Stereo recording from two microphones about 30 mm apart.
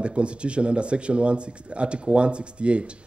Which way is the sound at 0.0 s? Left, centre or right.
Right.